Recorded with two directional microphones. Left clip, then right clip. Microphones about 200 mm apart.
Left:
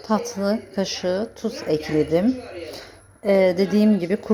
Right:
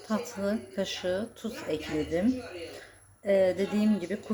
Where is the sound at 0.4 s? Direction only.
20° left (ahead or behind).